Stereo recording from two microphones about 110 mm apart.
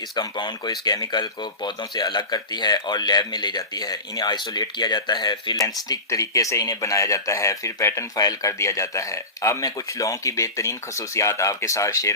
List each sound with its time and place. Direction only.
0.2 s speech: 40° left (ahead or behind)